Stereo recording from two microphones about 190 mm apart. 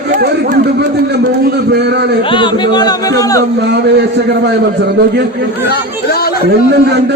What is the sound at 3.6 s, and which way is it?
Speech, 60° right (ahead or behind).